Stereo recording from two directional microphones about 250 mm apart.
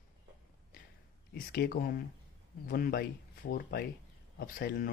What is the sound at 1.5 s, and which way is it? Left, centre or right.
Speech, left.